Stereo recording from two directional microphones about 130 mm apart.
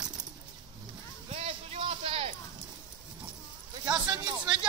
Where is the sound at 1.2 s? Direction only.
50° right (ahead or behind).